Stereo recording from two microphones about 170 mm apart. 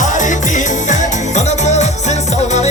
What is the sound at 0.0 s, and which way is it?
Music, 45° left (ahead or behind).